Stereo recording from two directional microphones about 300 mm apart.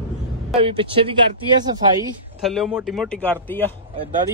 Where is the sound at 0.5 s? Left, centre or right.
Centre.